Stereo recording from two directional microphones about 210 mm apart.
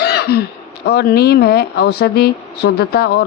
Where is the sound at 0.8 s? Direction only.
50° left (ahead or behind).